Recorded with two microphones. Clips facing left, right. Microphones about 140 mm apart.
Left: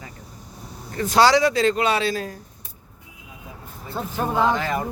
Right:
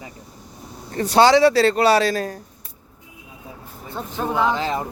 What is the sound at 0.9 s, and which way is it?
Speech, 35° right (ahead or behind).